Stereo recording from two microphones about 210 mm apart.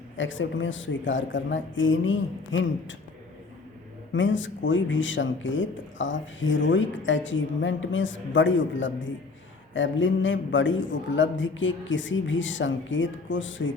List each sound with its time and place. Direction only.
0.2 s speech: 65° left (ahead or behind)
4.1 s speech: 65° left (ahead or behind)